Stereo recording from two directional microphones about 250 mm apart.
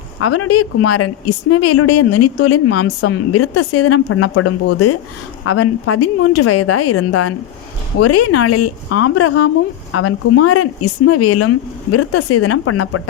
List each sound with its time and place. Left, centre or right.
0.2 s a woman's voice: left
8.9 s a woman's voice: left